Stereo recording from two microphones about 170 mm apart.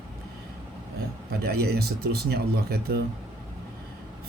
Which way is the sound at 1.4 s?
65° right (ahead or behind).